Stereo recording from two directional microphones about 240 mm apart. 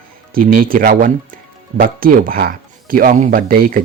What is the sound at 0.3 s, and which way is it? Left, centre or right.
Speech, right.